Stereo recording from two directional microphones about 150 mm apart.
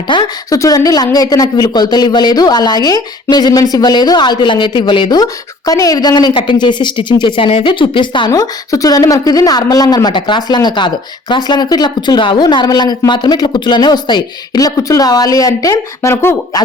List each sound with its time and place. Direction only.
0.1 s a woman's voice: 25° left (ahead or behind)